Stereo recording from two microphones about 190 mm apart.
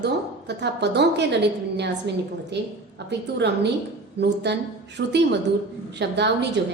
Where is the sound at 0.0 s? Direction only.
60° right (ahead or behind).